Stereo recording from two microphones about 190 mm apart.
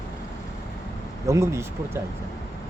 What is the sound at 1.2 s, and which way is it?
Speech, 15° right (ahead or behind).